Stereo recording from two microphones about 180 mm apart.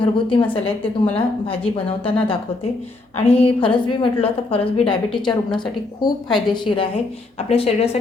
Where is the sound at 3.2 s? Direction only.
30° left (ahead or behind).